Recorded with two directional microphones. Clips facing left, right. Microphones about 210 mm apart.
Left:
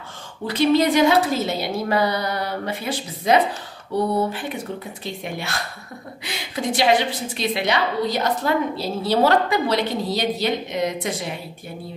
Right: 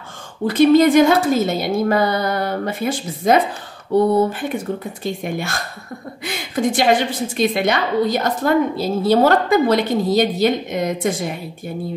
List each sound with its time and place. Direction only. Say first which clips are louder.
0.5 s a woman's voice: right 6 dB; 50° right (ahead or behind)